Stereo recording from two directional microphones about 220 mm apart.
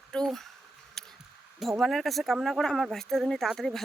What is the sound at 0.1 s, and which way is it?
Speech, centre (ahead or behind).